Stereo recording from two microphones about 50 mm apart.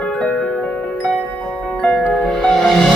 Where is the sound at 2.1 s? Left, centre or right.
Centre.